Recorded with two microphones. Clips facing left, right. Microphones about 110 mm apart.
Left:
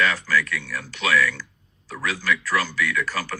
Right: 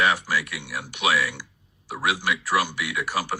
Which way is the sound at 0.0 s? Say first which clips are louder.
Left 1 dB; 15° right (ahead or behind).